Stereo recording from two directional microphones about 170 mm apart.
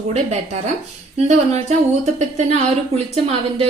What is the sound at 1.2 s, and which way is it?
Speech, 40° right (ahead or behind).